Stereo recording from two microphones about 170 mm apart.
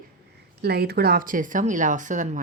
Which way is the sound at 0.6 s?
70° right (ahead or behind).